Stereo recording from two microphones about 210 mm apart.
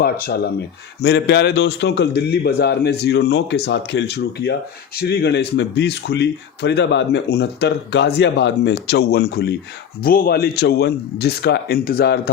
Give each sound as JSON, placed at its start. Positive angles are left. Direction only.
{"t": 0.0, "sound": "speech", "side_deg": 45}